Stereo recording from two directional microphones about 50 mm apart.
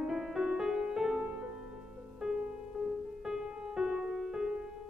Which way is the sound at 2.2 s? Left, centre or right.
Centre.